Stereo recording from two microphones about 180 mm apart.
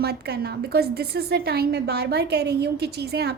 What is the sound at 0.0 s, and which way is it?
A woman's voice, 65° right (ahead or behind).